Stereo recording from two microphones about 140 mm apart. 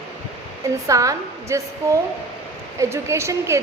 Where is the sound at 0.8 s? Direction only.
25° right (ahead or behind).